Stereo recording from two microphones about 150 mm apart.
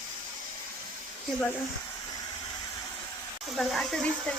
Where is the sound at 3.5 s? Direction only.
Centre (ahead or behind).